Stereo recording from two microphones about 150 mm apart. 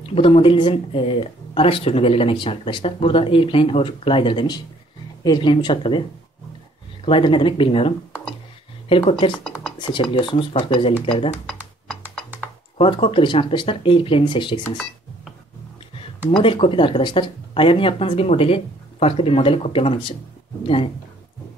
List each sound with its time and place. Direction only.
0.1 s speech: 40° left (ahead or behind)
7.1 s speech: 35° left (ahead or behind)
12.7 s speech: 35° left (ahead or behind)
16.0 s speech: 35° left (ahead or behind)